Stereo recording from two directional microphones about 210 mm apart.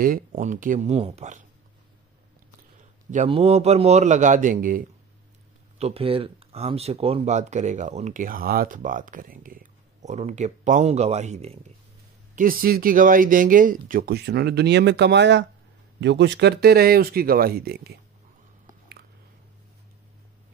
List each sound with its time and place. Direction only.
0.0 s speech: 40° right (ahead or behind)
3.1 s speech: 30° right (ahead or behind)
5.8 s speech: 30° right (ahead or behind)
12.4 s speech: 45° right (ahead or behind)